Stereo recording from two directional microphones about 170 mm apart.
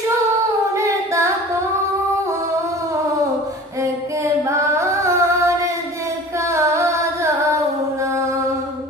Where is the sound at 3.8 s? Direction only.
15° right (ahead or behind).